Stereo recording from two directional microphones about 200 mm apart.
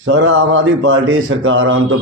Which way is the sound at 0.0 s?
75° right (ahead or behind).